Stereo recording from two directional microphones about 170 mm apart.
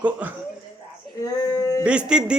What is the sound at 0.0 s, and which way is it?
Speech, 10° right (ahead or behind).